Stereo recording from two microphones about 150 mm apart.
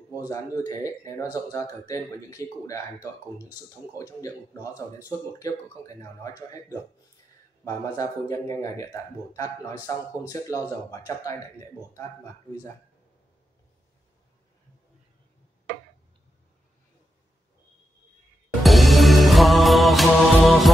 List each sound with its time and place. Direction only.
0.3 s speech: 20° left (ahead or behind)
7.6 s speech: 20° left (ahead or behind)
18.6 s music: centre (ahead or behind)